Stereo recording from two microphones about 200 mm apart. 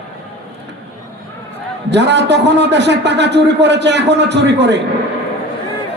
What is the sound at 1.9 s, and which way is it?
A man's voice, 60° right (ahead or behind).